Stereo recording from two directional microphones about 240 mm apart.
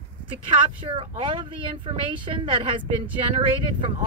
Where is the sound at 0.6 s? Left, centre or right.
Right.